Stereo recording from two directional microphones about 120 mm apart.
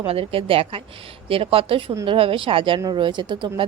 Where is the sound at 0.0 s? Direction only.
50° right (ahead or behind).